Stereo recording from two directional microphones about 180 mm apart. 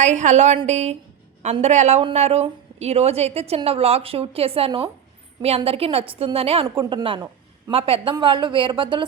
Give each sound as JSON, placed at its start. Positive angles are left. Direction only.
{"t": 0.0, "sound": "a woman's voice", "side_deg": -40}